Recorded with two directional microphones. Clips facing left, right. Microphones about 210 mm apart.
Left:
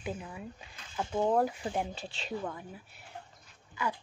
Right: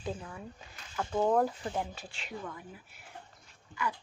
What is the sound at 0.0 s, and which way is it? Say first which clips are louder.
Speech: even; 10° left (ahead or behind).